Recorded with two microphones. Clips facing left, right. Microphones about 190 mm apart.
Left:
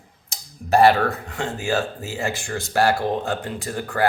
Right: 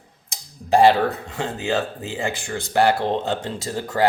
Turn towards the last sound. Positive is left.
turn(degrees=-25)  # may be behind; listen again after turning